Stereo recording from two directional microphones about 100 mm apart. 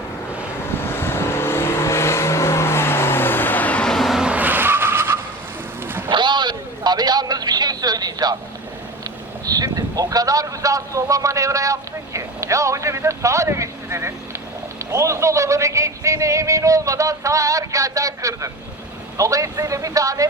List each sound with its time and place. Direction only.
0.7 s vehicle: 25° left (ahead or behind); by 5.2 s 20° right (ahead or behind)
5.8 s boat: 20° right (ahead or behind)
6.1 s a sound: 50° right (ahead or behind)
9.5 s a man's voice: 40° right (ahead or behind)